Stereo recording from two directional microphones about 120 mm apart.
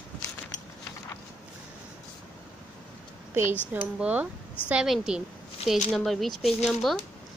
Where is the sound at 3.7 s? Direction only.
10° right (ahead or behind).